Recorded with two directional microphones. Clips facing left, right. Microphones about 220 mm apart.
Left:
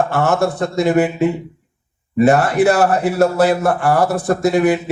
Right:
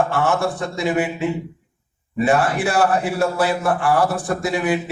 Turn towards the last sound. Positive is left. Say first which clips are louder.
# left 6 dB
turn(degrees=40)  # may be behind; listen again after turning